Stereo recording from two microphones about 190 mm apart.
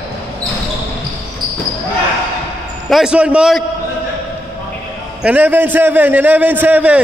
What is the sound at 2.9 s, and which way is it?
Speech, 5° right (ahead or behind).